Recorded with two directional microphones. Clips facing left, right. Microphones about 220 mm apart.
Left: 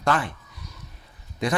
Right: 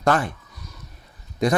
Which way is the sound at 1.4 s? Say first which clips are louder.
Right 5 dB; 40° right (ahead or behind).